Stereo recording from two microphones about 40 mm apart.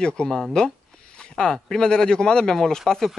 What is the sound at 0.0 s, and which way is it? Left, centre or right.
Speech, left.